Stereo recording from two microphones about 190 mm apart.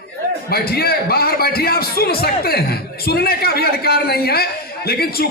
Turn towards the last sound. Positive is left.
turn(degrees=55)  # may be behind; listen again after turning